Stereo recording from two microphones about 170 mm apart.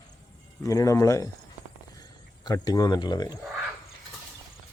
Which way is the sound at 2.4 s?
20° left (ahead or behind).